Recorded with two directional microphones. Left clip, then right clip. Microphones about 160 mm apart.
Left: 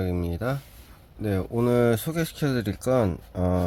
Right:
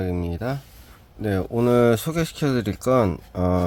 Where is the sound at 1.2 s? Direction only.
20° right (ahead or behind).